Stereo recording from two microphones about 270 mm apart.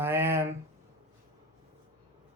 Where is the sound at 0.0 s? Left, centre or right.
Centre.